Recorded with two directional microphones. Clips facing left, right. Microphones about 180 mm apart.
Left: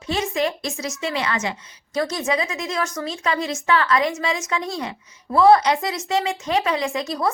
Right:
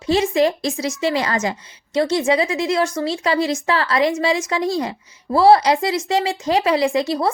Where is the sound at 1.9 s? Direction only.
30° right (ahead or behind).